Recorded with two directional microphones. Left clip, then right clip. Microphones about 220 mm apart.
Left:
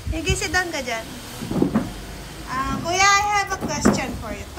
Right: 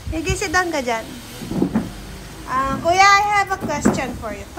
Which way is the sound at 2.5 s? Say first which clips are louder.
Right 6 dB; centre (ahead or behind).